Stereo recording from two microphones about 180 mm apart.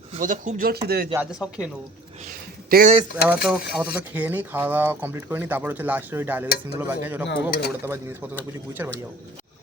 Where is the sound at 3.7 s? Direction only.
10° right (ahead or behind).